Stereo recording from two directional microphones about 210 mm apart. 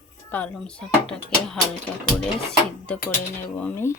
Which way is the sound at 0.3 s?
5° left (ahead or behind).